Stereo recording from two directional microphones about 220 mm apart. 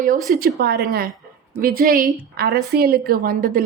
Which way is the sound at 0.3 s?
45° right (ahead or behind).